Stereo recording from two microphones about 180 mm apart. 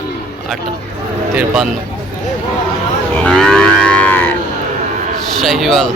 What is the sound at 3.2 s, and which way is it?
Livestock, 5° left (ahead or behind).